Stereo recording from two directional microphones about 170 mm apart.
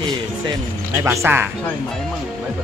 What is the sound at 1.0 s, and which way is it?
Speech, 15° right (ahead or behind).